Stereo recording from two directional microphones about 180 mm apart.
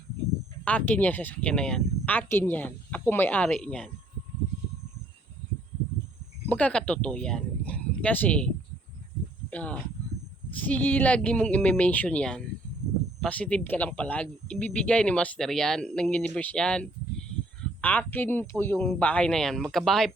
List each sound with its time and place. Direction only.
0.6 s speech: 10° left (ahead or behind)
6.5 s speech: 5° left (ahead or behind)
9.5 s speech: 10° left (ahead or behind)